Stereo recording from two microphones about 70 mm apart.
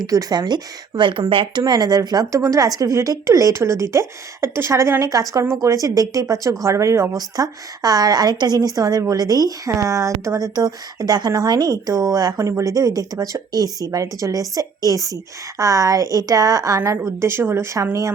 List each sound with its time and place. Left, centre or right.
0.0 s a woman's voice: right
2.3 s a woman's voice: right
6.7 s a woman's voice: right
7.2 s a woman's voice: right
12.5 s a woman's voice: right